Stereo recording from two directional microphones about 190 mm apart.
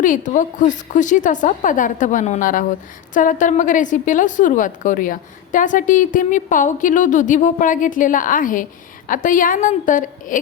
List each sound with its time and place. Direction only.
0.0 s a woman's voice: 45° left (ahead or behind)